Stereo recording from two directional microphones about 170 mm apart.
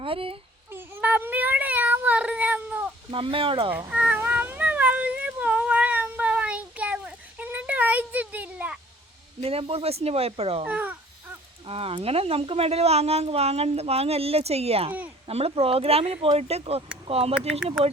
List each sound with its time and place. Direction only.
0.0 s speech: 30° right (ahead or behind)
0.7 s cat: 10° right (ahead or behind)
3.1 s speech: 30° right (ahead or behind)
3.7 s cat: 10° right (ahead or behind)
9.4 s speech: 35° right (ahead or behind)
10.6 s speech: 10° right (ahead or behind)
11.6 s speech: 35° right (ahead or behind)
17.3 s speech: 5° right (ahead or behind)